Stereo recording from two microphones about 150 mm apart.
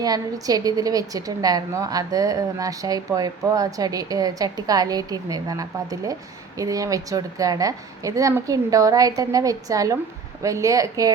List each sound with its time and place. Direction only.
0.0 s a woman's voice: 25° right (ahead or behind)